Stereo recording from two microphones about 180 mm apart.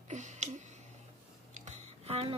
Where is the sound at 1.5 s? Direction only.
35° right (ahead or behind).